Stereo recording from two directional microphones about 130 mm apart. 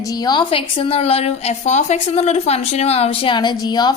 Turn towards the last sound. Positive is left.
turn(degrees=35)  # may be behind; listen again after turning